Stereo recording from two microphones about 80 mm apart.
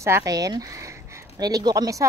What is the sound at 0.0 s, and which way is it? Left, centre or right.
Speech, right.